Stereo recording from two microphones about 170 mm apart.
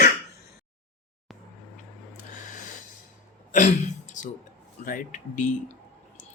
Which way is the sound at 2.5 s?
50° left (ahead or behind).